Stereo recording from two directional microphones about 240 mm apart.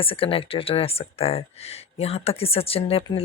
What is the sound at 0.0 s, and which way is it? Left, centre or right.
Speech, left.